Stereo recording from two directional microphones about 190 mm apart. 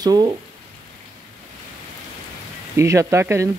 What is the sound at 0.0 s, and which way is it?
Speech, 20° right (ahead or behind).